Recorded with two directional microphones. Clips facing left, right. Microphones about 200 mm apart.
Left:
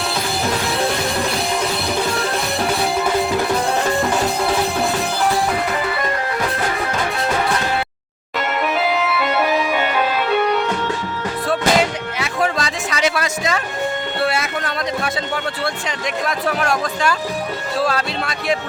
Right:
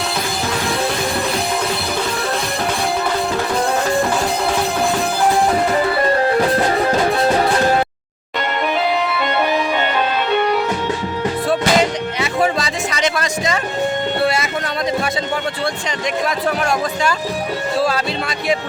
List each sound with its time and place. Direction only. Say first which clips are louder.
5.7 s music: right 6 dB; 35° right (ahead or behind)
8.8 s music: right 1 dB; 5° left (ahead or behind)
16.2 s speech: even; centre (ahead or behind)